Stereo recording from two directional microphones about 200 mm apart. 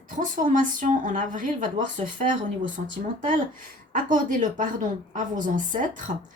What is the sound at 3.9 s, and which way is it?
Speech, 40° right (ahead or behind).